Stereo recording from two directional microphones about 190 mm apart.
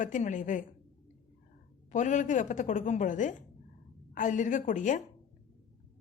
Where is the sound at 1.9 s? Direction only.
40° left (ahead or behind).